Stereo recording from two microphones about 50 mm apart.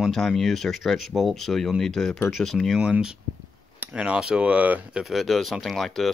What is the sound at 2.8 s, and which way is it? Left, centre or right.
Speech, centre.